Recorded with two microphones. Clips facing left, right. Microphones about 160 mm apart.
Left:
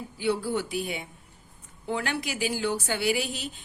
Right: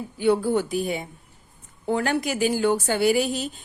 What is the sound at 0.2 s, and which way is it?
A woman's voice, 50° right (ahead or behind).